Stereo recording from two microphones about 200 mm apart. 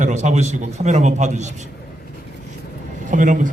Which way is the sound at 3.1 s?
40° right (ahead or behind).